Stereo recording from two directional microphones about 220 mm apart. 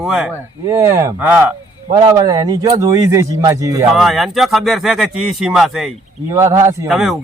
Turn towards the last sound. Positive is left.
turn(degrees=0)  # may be behind; listen again after turning